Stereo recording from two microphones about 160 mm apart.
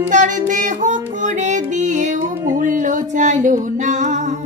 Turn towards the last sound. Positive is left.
turn(degrees=-50)  # may be behind; listen again after turning